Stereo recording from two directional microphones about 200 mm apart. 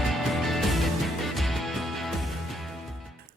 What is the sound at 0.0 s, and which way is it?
Music, centre (ahead or behind).